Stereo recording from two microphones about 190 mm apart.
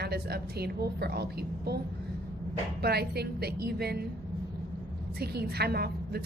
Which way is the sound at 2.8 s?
55° right (ahead or behind).